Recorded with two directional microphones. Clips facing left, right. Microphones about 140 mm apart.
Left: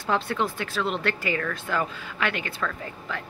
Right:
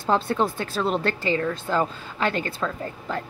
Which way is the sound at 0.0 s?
30° right (ahead or behind).